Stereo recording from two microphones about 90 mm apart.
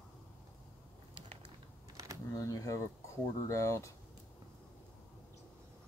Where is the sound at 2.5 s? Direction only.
40° left (ahead or behind).